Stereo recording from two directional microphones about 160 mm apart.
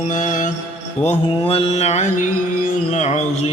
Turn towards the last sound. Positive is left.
turn(degrees=45)  # may be behind; listen again after turning